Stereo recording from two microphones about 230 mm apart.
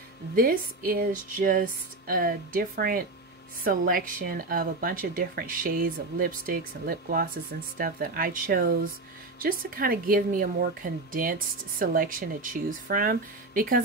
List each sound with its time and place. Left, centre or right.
0.4 s a woman's voice: right